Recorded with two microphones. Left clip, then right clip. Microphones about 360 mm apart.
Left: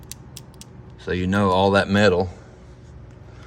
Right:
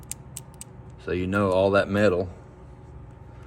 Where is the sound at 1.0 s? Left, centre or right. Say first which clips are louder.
Left 3 dB; centre.